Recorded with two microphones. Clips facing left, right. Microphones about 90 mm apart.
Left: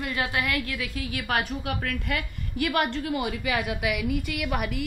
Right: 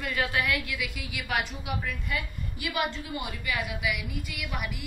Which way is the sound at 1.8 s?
75° left (ahead or behind).